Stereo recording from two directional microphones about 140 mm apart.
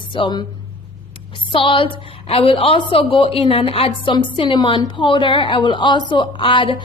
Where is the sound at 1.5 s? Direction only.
40° left (ahead or behind).